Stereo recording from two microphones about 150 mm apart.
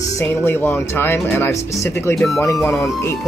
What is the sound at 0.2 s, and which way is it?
Speech, 15° left (ahead or behind).